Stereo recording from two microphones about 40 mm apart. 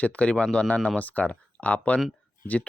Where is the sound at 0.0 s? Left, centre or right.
Left.